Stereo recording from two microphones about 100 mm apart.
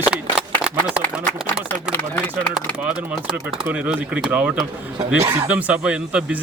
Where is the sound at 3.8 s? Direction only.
10° right (ahead or behind).